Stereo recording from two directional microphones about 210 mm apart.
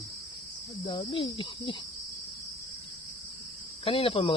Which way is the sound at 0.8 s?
25° left (ahead or behind).